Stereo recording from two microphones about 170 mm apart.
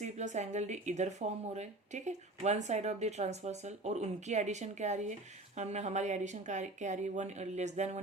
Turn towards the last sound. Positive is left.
turn(degrees=-40)  # may be behind; listen again after turning